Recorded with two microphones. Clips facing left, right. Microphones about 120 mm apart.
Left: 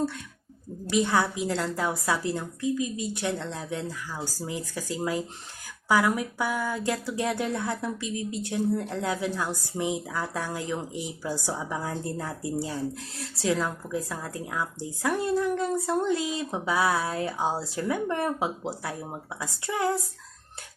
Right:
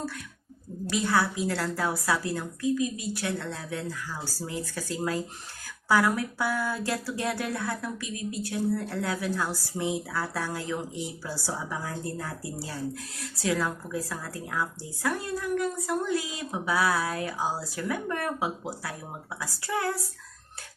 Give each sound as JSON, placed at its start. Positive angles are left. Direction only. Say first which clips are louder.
{"t": 0.9, "sound": "speech", "louder": "left 2 dB", "side_deg": 20}